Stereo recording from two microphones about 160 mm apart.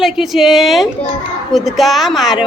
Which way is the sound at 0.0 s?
Centre (ahead or behind).